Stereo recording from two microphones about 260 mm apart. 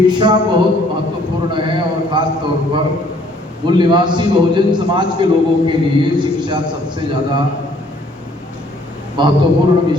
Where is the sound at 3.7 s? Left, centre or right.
Centre.